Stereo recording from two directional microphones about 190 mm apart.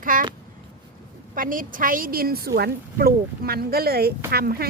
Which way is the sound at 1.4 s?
45° right (ahead or behind).